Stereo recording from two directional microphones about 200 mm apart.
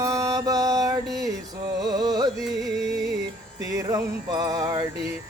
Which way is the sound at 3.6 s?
15° right (ahead or behind).